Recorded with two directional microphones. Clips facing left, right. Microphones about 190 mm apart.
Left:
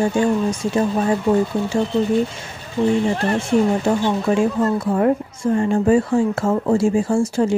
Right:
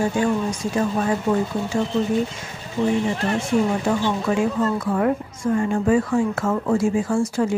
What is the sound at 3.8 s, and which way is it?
A woman's voice, 30° left (ahead or behind).